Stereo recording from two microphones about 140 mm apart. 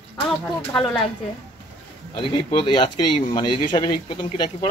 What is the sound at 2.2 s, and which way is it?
Speech, 40° left (ahead or behind).